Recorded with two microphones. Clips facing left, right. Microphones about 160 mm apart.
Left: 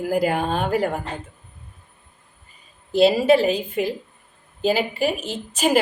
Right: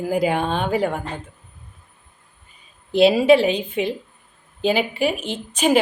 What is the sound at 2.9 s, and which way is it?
A woman's voice, centre (ahead or behind).